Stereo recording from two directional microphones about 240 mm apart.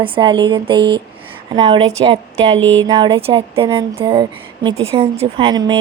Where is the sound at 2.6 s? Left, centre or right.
Right.